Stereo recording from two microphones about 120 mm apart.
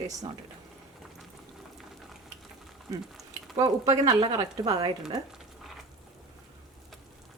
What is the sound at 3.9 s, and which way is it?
A woman's voice, 50° right (ahead or behind).